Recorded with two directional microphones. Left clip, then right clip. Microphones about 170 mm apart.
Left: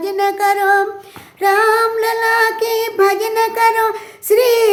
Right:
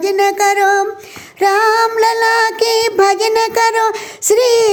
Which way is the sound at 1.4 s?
40° right (ahead or behind).